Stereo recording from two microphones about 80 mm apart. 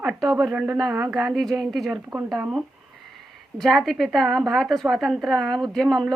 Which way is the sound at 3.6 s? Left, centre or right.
Centre.